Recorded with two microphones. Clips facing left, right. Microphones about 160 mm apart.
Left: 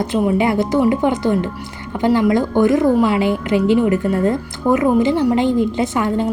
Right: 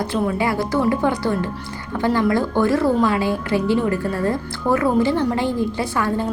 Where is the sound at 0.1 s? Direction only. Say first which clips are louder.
Left 7 dB; 20° left (ahead or behind).